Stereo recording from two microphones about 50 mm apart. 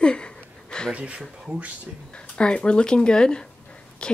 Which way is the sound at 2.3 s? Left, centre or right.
Centre.